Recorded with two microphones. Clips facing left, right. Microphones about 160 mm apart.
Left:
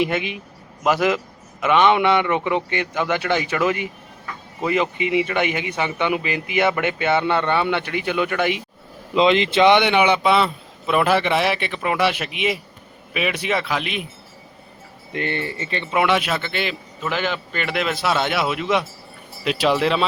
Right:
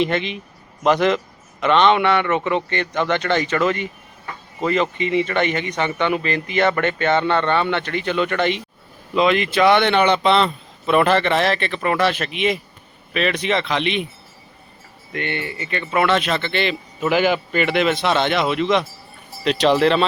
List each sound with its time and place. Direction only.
0.0 s a man's voice: 10° left (ahead or behind)
9.1 s speech: 25° left (ahead or behind); by 14.1 s 5° left (ahead or behind)
15.1 s speech: 30° left (ahead or behind)
15.9 s speech: 15° left (ahead or behind)
17.0 s a man's voice: 10° right (ahead or behind)